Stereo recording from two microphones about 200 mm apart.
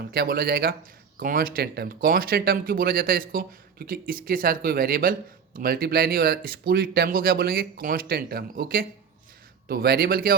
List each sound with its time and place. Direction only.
0.1 s speech: 50° right (ahead or behind)